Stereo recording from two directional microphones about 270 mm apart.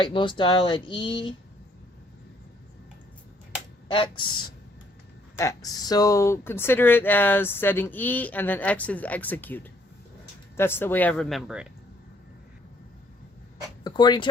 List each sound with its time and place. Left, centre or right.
0.0 s speech: centre
3.9 s speech: centre
10.6 s speech: centre
13.8 s speech: centre